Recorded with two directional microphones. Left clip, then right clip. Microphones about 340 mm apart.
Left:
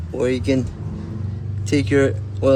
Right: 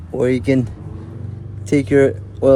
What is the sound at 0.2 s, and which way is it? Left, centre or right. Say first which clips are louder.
Speech: right 3 dB; right.